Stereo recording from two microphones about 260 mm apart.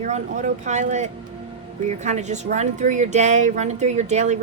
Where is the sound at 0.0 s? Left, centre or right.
Right.